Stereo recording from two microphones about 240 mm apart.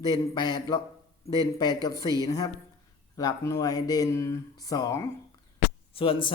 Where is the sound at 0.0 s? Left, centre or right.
Centre.